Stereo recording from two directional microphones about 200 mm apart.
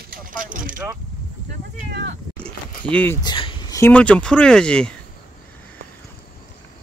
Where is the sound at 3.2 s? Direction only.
25° left (ahead or behind).